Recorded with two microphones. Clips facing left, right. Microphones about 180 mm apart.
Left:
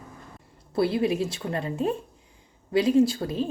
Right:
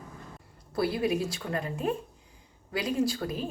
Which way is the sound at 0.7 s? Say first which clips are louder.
Left 4 dB; 25° left (ahead or behind).